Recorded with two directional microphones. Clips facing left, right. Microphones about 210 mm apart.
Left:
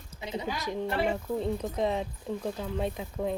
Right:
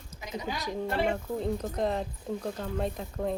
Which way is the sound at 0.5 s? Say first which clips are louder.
Right 1 dB; centre (ahead or behind).